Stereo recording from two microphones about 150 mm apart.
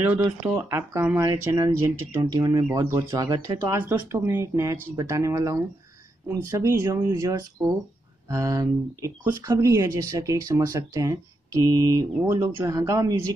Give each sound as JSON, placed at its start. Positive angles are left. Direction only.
{"t": 0.4, "sound": "speech", "side_deg": -15}